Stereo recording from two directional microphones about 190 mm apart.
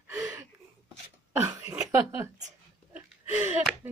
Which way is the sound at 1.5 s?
15° right (ahead or behind).